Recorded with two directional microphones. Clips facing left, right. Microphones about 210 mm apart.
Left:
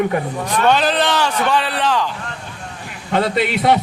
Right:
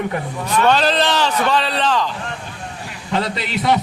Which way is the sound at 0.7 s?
10° left (ahead or behind).